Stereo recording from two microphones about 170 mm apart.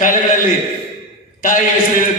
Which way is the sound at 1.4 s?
50° left (ahead or behind).